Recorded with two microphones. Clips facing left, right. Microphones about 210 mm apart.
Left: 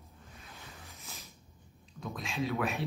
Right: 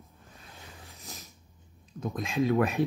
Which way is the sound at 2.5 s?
50° right (ahead or behind).